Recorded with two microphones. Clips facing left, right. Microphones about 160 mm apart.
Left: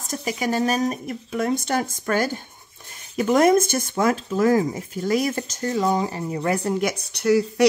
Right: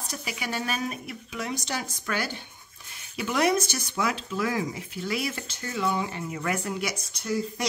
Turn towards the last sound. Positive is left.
turn(degrees=70)  # may be behind; listen again after turning